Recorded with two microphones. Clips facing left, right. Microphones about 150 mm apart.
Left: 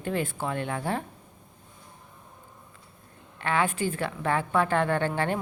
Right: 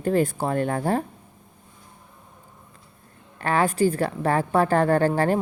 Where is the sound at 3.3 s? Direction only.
40° right (ahead or behind).